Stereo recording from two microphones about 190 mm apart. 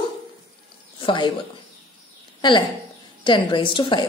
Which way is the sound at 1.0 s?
25° left (ahead or behind).